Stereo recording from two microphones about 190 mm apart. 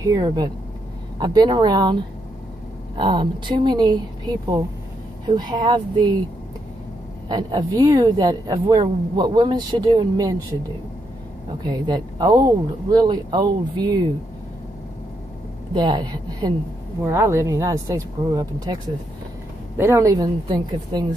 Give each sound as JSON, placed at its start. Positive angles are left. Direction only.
{"t": 0.0, "sound": "a woman's voice", "side_deg": -20}
{"t": 3.0, "sound": "a woman's voice", "side_deg": -25}
{"t": 7.2, "sound": "a woman's voice", "side_deg": -20}
{"t": 11.6, "sound": "a woman's voice", "side_deg": -20}
{"t": 15.7, "sound": "a woman's voice", "side_deg": -20}
{"t": 19.8, "sound": "speech", "side_deg": -15}